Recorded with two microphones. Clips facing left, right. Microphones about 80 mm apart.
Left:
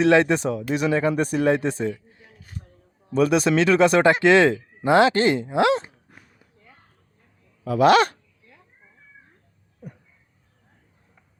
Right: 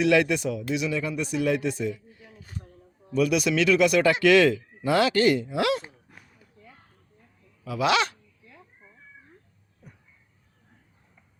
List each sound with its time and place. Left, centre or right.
0.0 s speech: left
7.6 s speech: left
9.8 s a sound: left